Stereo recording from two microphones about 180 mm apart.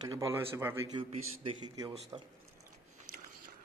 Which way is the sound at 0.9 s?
30° right (ahead or behind).